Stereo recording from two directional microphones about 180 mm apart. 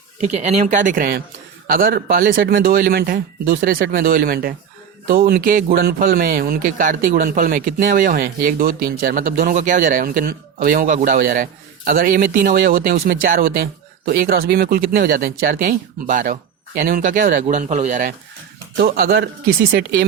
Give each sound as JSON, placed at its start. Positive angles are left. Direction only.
{"t": 0.2, "sound": "speech", "side_deg": -35}
{"t": 18.8, "sound": "speech", "side_deg": -60}